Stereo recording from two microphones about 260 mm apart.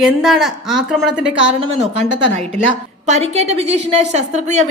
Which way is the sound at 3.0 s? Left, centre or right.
Right.